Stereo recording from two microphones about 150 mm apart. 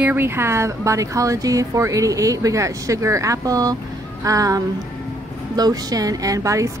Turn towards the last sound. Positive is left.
turn(degrees=-20)  # may be behind; listen again after turning